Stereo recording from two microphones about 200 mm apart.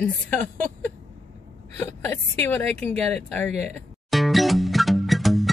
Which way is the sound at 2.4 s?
10° left (ahead or behind).